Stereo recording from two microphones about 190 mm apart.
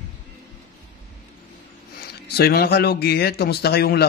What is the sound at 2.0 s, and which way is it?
Speech, 55° left (ahead or behind).